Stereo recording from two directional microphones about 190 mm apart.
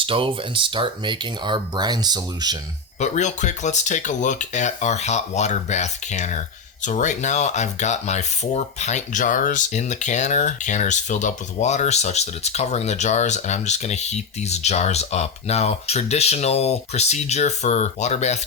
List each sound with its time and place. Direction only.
0.0 s speech: 30° right (ahead or behind)
3.0 s speech: 40° left (ahead or behind)